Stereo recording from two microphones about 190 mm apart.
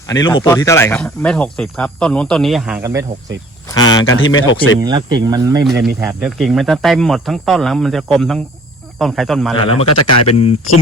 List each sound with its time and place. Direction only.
0.1 s speech: 20° left (ahead or behind); by 3.1 s 15° right (ahead or behind)
4.0 s speech: 90° left
4.8 s speech: 20° right (ahead or behind)
5.6 s speech: centre (ahead or behind)
9.6 s speech: 30° left (ahead or behind)